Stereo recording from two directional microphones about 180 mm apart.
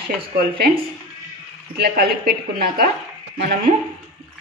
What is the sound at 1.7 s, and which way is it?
Speech, 60° right (ahead or behind).